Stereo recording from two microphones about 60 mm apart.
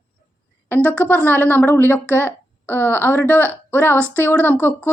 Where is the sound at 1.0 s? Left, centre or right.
Left.